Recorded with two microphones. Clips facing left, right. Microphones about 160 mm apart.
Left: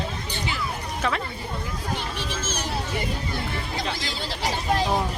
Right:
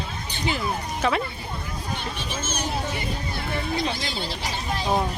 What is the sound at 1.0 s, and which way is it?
Speech, 5° right (ahead or behind).